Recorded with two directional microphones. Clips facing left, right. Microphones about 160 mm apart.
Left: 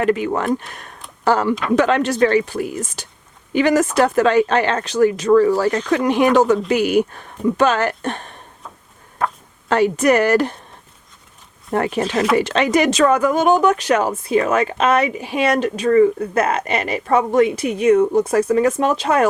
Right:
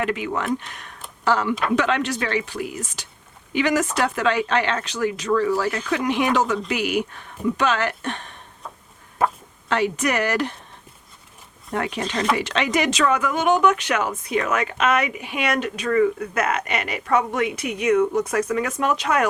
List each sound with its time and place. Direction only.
0.0 s speech: 40° left (ahead or behind)
9.2 s speech: 5° right (ahead or behind)
9.6 s speech: 40° left (ahead or behind)
11.7 s speech: 45° left (ahead or behind)
12.0 s speech: 5° left (ahead or behind)
12.4 s speech: 40° left (ahead or behind)